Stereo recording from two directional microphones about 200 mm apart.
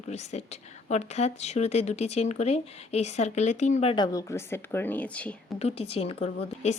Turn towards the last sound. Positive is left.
turn(degrees=35)  # may be behind; listen again after turning